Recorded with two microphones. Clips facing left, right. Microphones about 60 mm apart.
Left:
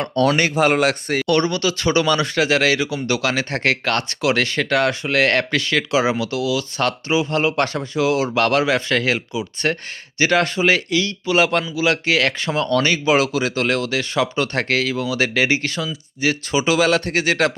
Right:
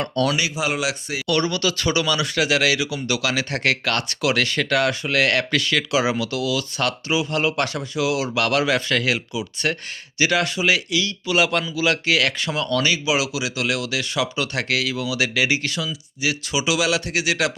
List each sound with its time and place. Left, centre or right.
0.0 s speech: left
0.3 s speech: left
1.3 s speech: left